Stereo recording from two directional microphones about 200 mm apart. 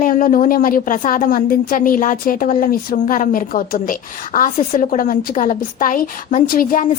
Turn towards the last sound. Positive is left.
turn(degrees=45)  # may be behind; listen again after turning